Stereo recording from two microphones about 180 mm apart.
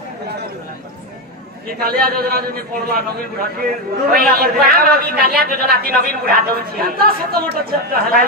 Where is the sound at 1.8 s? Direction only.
55° right (ahead or behind).